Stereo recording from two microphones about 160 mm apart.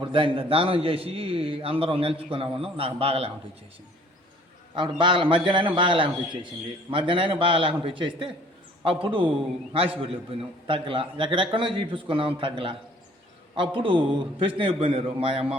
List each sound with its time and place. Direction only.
0.0 s a man's voice: 30° right (ahead or behind)
4.7 s a man's voice: 30° right (ahead or behind)
10.7 s a man's voice: 35° right (ahead or behind)